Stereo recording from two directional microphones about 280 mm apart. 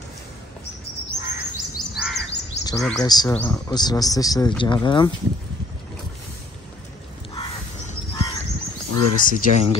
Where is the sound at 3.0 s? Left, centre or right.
Centre.